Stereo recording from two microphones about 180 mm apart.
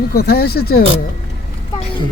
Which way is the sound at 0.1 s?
60° left (ahead or behind).